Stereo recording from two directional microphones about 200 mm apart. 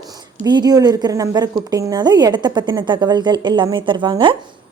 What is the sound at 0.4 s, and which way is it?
Speech, 20° right (ahead or behind).